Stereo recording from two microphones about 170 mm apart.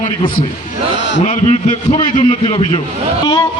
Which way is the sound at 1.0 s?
90° left.